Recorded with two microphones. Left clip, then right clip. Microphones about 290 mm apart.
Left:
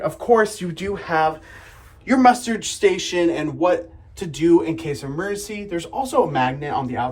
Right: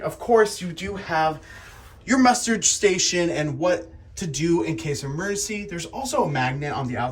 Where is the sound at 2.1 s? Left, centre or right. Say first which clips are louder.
Left 4 dB; centre.